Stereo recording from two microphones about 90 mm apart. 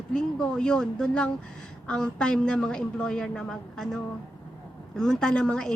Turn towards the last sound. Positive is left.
turn(degrees=10)  # may be behind; listen again after turning